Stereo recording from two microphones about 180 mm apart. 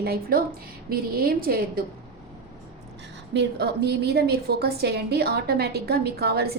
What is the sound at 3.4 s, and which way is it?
A woman's voice, 65° right (ahead or behind).